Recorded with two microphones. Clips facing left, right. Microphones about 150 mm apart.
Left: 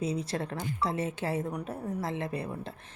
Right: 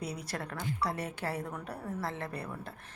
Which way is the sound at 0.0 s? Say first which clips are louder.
Left 7 dB; 25° left (ahead or behind).